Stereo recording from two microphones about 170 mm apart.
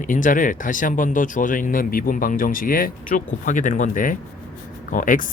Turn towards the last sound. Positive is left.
turn(degrees=50)  # may be behind; listen again after turning